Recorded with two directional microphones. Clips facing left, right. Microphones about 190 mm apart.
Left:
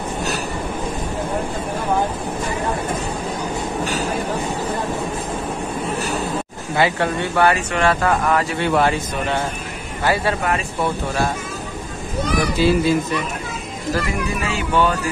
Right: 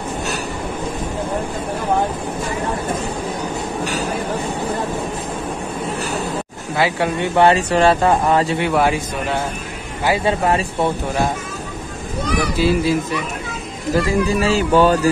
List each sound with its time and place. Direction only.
6.8 s a man's voice: 10° right (ahead or behind)
7.3 s speech: 25° right (ahead or behind)
8.5 s a man's voice: 10° right (ahead or behind)
10.4 s speech: 30° right (ahead or behind)
12.5 s speech: centre (ahead or behind)
13.9 s speech: 35° right (ahead or behind)